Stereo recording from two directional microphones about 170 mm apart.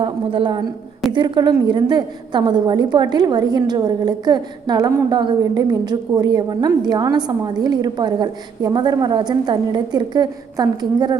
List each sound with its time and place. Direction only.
0.0 s a woman's voice: 30° right (ahead or behind)